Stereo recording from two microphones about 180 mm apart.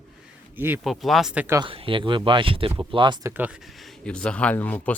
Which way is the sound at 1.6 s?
30° right (ahead or behind).